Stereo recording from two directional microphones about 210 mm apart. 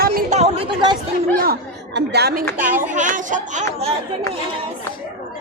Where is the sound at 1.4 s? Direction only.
50° right (ahead or behind).